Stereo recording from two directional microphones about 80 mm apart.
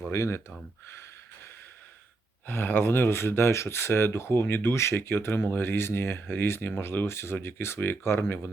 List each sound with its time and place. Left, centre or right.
0.1 s speech: left
2.5 s speech: left